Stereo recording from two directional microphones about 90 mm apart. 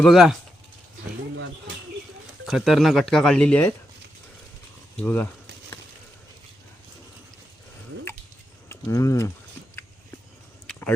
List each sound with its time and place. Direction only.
0.0 s speech: centre (ahead or behind)
2.5 s speech: centre (ahead or behind)
4.9 s speech: 20° left (ahead or behind)
8.7 s speech: 35° left (ahead or behind)
10.7 s a sound: 15° left (ahead or behind)